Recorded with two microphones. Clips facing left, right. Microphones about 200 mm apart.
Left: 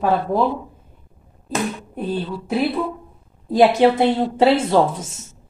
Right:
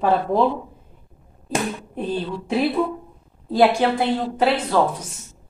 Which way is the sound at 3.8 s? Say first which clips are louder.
Left 5 dB; 25° left (ahead or behind).